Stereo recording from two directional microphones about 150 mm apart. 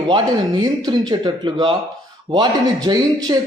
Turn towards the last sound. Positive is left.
turn(degrees=-25)  # may be behind; listen again after turning